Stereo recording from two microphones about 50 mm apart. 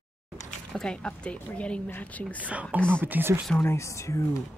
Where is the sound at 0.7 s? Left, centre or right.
Centre.